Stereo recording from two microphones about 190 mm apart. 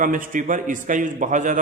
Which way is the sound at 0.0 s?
45° right (ahead or behind).